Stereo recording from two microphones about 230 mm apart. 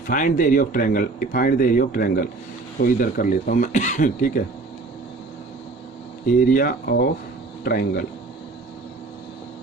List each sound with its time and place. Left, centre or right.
0.1 s speech: left
6.5 s speech: left